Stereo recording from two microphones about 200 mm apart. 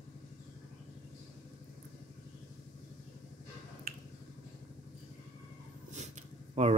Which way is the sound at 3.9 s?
45° right (ahead or behind).